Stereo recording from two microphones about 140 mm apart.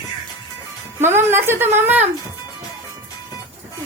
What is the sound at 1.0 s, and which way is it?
A woman's voice, 15° right (ahead or behind).